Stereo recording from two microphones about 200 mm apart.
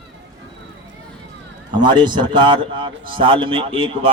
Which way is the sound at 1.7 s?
25° right (ahead or behind).